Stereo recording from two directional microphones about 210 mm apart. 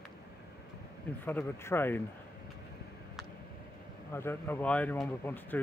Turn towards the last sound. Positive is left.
turn(degrees=10)  # may be behind; listen again after turning